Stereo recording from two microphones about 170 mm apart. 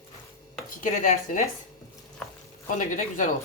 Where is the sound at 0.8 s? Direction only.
50° left (ahead or behind).